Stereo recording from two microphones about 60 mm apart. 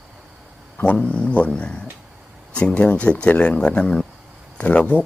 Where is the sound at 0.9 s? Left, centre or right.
Centre.